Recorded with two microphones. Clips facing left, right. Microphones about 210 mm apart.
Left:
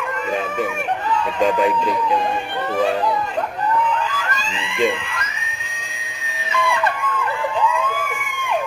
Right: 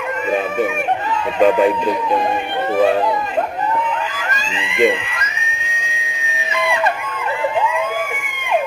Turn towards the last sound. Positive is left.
turn(degrees=-20)  # may be behind; listen again after turning